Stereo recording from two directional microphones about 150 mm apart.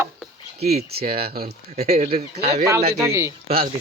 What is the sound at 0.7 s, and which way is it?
Speech, 90° right.